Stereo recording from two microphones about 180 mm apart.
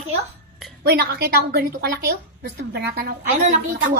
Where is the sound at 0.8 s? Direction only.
60° right (ahead or behind); by 3.5 s 45° right (ahead or behind).